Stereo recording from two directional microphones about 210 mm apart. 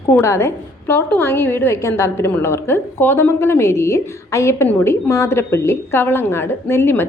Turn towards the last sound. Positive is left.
turn(degrees=10)  # may be behind; listen again after turning